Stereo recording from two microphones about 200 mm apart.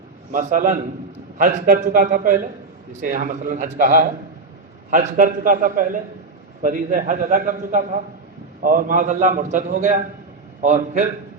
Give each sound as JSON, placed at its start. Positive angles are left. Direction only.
{"t": 0.3, "sound": "a man's voice", "side_deg": -40}